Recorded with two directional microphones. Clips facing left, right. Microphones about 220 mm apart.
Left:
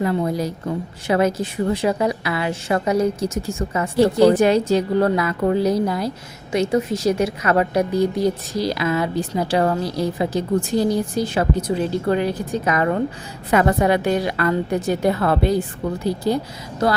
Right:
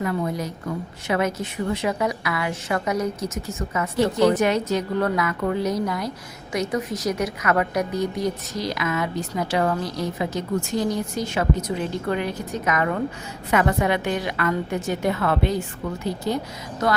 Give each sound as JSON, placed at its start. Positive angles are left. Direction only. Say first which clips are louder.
{"t": 0.0, "sound": "a woman's voice", "louder": "left 5 dB", "side_deg": 30}